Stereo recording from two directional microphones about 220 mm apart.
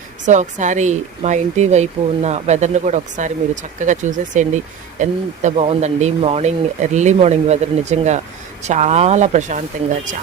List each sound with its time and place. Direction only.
0.3 s speech: 35° right (ahead or behind)